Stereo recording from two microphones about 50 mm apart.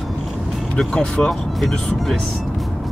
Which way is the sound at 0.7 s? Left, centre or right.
Centre.